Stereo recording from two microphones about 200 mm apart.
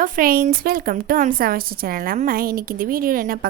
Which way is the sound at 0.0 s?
45° right (ahead or behind).